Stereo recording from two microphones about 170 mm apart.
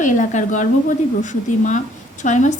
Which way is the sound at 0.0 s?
50° left (ahead or behind).